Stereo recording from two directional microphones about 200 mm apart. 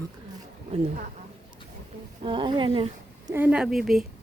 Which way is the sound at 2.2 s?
25° right (ahead or behind).